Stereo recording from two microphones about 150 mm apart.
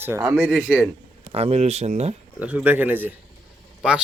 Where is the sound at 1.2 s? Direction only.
45° right (ahead or behind).